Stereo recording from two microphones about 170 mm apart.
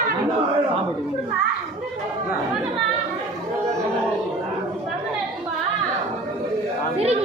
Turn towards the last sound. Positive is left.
turn(degrees=-40)  # may be behind; listen again after turning